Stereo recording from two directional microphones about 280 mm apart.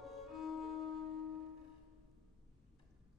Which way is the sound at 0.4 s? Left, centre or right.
Centre.